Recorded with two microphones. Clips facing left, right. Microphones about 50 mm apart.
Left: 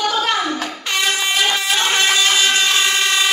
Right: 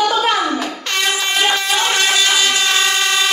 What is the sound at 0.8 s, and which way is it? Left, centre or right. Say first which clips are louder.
Air horn: right 1 dB; centre.